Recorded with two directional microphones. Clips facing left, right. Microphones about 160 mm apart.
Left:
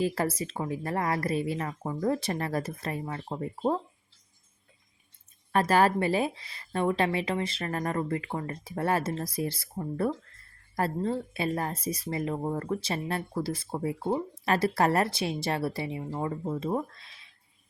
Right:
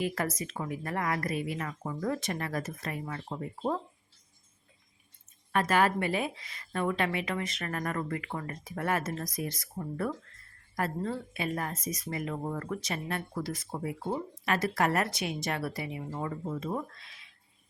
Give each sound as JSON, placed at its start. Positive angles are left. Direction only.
{"t": 0.0, "sound": "speech", "side_deg": 30}
{"t": 5.5, "sound": "speech", "side_deg": 35}